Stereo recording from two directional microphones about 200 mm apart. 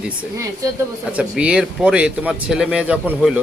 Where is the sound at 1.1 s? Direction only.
5° right (ahead or behind).